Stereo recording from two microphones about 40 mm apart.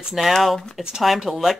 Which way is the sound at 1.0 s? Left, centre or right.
Centre.